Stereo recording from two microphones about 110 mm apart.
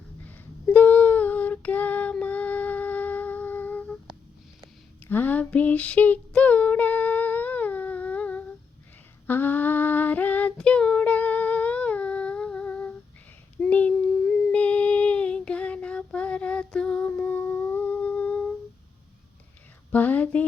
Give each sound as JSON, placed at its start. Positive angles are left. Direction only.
{"t": 0.3, "sound": "female singing", "side_deg": 15}
{"t": 5.0, "sound": "female singing", "side_deg": 15}
{"t": 13.6, "sound": "child singing", "side_deg": 15}
{"t": 14.5, "sound": "female singing", "side_deg": 10}
{"t": 19.9, "sound": "a sound", "side_deg": 15}